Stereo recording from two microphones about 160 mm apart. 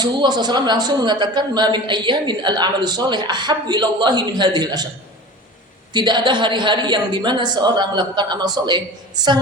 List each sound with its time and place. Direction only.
0.0 s a woman's voice: 25° right (ahead or behind)
5.9 s a woman's voice: 30° right (ahead or behind)